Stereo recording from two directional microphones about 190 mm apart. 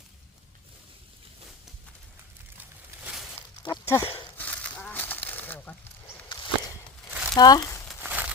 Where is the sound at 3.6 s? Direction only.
15° left (ahead or behind).